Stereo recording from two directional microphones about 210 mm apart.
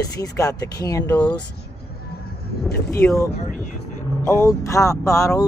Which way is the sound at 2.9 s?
10° left (ahead or behind).